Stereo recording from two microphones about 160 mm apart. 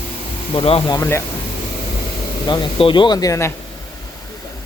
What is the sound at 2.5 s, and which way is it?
Speech, 30° left (ahead or behind).